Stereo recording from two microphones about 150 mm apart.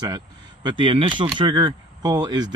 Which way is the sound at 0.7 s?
35° right (ahead or behind).